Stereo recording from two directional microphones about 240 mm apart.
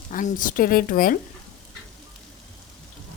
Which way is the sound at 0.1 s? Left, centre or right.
Left.